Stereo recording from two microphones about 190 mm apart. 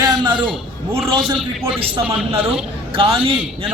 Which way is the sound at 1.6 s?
30° right (ahead or behind).